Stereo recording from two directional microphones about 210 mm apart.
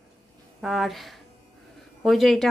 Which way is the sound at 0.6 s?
Centre (ahead or behind).